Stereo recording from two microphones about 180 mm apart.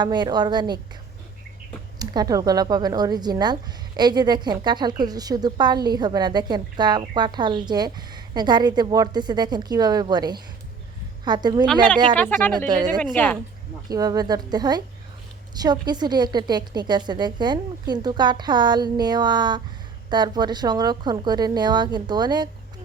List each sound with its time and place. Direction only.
0.0 s a woman's voice: 25° right (ahead or behind)
2.0 s a woman's voice: 20° right (ahead or behind)
12.1 s speech: 10° left (ahead or behind)
13.9 s a woman's voice: 20° right (ahead or behind)